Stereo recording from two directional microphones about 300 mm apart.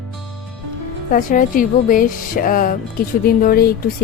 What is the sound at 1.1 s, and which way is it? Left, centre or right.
A woman's voice, left.